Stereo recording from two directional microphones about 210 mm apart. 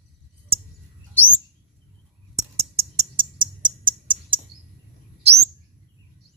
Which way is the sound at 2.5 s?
30° right (ahead or behind).